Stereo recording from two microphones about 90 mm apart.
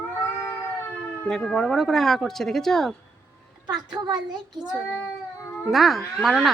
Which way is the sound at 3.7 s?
50° right (ahead or behind).